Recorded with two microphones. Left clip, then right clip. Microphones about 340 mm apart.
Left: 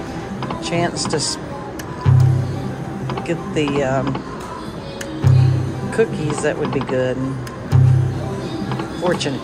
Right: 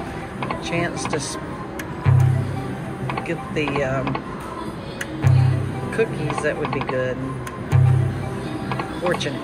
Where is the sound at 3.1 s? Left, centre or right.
Centre.